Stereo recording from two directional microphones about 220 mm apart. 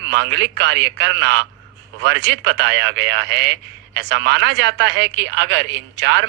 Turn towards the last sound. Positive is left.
turn(degrees=-55)  # may be behind; listen again after turning